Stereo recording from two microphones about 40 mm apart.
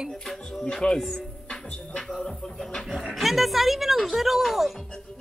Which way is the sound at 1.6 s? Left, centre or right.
Left.